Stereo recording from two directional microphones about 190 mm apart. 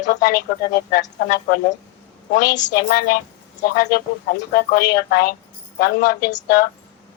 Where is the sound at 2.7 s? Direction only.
55° left (ahead or behind).